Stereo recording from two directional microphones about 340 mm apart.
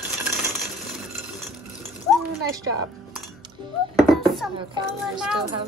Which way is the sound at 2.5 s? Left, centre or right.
Centre.